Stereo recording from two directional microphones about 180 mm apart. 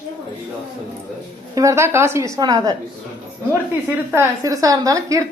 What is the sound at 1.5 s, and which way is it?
A woman's voice, 15° right (ahead or behind).